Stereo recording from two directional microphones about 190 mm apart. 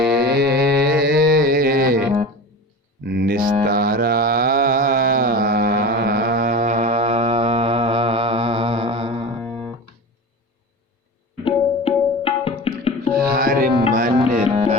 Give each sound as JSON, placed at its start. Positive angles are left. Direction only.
{"t": 0.2, "sound": "mantra", "side_deg": -60}
{"t": 1.0, "sound": "music", "side_deg": -55}
{"t": 3.0, "sound": "music", "side_deg": -60}
{"t": 9.4, "sound": "music", "side_deg": 5}
{"t": 11.4, "sound": "tabla", "side_deg": 30}
{"t": 13.1, "sound": "music", "side_deg": -50}
{"t": 14.0, "sound": "music", "side_deg": -40}